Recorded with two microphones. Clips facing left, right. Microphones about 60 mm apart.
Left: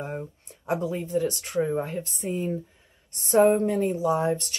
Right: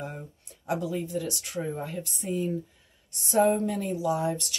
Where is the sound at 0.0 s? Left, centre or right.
Left.